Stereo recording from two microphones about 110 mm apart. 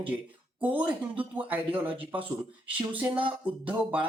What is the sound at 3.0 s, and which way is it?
Speech, 50° right (ahead or behind).